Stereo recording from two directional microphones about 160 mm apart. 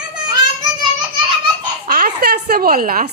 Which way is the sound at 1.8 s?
65° right (ahead or behind).